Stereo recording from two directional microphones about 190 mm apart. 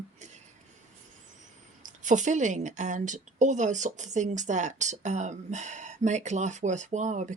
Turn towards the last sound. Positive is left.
turn(degrees=-40)  # may be behind; listen again after turning